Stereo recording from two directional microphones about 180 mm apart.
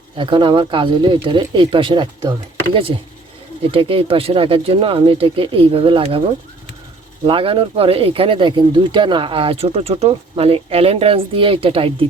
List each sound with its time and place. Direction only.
0.2 s speech: 25° right (ahead or behind)
3.6 s speech: 30° right (ahead or behind)
7.3 s speech: 30° right (ahead or behind)